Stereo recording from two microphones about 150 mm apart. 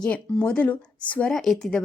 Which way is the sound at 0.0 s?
5° left (ahead or behind).